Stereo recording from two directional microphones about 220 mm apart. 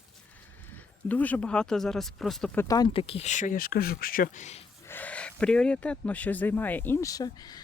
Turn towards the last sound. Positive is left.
turn(degrees=15)  # may be behind; listen again after turning